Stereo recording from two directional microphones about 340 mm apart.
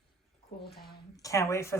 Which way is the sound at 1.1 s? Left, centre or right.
Centre.